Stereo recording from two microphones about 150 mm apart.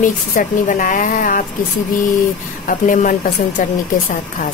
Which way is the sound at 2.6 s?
60° left (ahead or behind).